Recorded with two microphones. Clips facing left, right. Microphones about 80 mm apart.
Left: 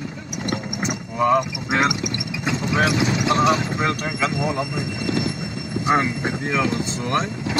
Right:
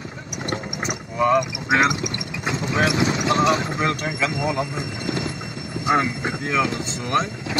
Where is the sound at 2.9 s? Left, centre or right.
Right.